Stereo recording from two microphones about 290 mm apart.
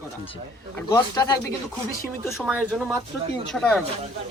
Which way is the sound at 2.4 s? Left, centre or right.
Centre.